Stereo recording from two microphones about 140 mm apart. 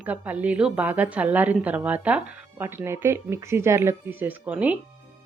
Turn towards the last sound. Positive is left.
turn(degrees=-10)  # may be behind; listen again after turning